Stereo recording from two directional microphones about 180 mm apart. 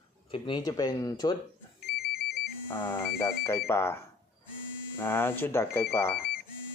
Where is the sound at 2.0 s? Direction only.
60° left (ahead or behind).